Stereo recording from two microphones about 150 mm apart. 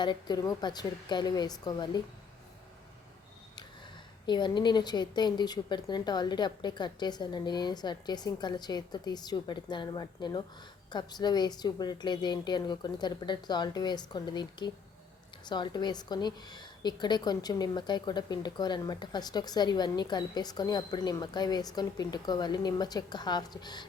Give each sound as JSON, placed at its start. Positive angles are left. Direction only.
{"t": 0.0, "sound": "a woman's voice", "side_deg": 30}
{"t": 4.3, "sound": "a woman's voice", "side_deg": 30}